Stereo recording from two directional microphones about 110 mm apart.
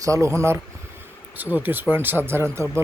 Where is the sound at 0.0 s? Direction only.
30° right (ahead or behind).